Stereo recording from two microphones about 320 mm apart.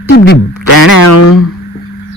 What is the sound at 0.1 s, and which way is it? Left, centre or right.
Speech, left.